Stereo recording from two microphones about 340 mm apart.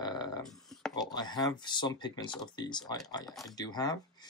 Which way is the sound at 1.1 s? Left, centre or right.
Centre.